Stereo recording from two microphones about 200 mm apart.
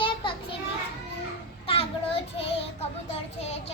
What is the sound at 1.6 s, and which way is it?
Child singing, 30° left (ahead or behind).